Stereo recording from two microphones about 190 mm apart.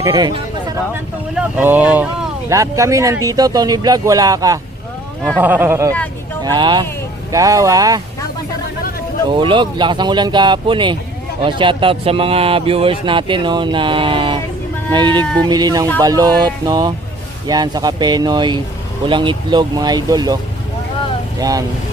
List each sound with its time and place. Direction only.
0.0 s speech: 20° right (ahead or behind)
1.4 s speech: 10° right (ahead or behind)
6.4 s speech: 25° right (ahead or behind)
9.3 s speech: 25° right (ahead or behind)
15.2 s speech: 10° left (ahead or behind)
15.4 s speech: 20° right (ahead or behind)